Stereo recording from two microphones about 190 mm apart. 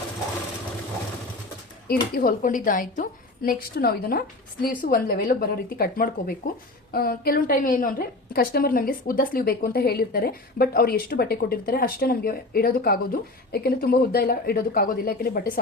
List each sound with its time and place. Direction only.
1.9 s a woman's voice: 50° left (ahead or behind)